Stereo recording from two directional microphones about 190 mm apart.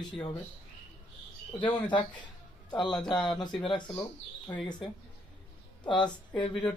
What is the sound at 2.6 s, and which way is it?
A man's voice, 25° left (ahead or behind).